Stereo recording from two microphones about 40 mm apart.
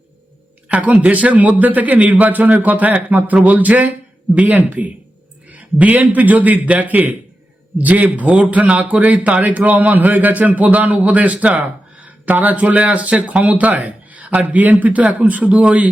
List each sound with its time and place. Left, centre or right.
0.7 s a man's voice: right